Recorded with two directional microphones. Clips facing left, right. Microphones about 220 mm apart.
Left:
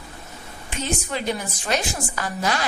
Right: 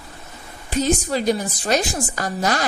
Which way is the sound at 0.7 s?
40° right (ahead or behind).